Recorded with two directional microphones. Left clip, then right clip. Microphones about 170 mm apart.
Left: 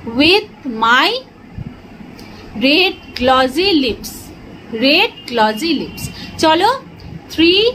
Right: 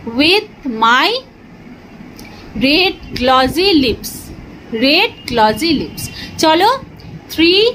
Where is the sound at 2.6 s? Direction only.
15° right (ahead or behind).